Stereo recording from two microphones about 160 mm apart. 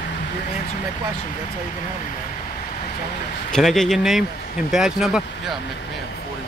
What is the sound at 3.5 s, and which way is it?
Speech, 5° left (ahead or behind).